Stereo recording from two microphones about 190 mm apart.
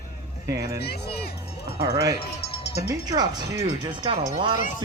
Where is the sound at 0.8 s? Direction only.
55° left (ahead or behind).